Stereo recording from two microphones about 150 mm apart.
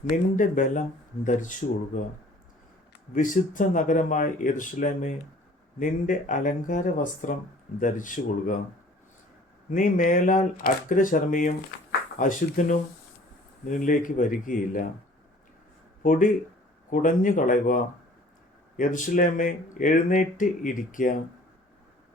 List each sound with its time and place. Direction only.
0.1 s speech: 60° left (ahead or behind)
3.2 s speech: 60° left (ahead or behind)
9.7 s speech: 65° left (ahead or behind)
16.0 s speech: 65° left (ahead or behind)
18.8 s speech: 60° left (ahead or behind)